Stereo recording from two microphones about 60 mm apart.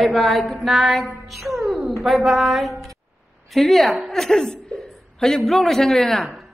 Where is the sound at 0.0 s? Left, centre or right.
Centre.